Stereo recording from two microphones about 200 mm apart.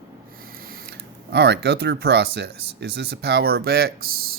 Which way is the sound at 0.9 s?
55° right (ahead or behind).